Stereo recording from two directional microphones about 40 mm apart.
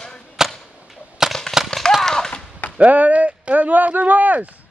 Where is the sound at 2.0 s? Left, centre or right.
Centre.